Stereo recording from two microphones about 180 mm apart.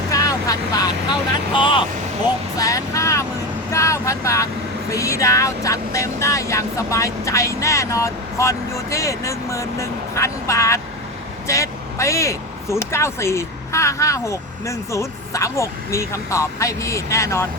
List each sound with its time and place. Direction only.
0.1 s vehicle: 20° left (ahead or behind)
1.5 s speech: 25° left (ahead or behind)